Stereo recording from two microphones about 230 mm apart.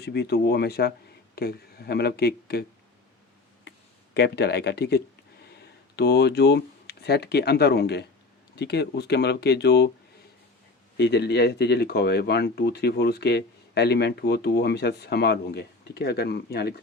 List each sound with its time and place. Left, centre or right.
0.0 s speech: left
3.7 s a sound: left
4.1 s speech: left
10.9 s speech: left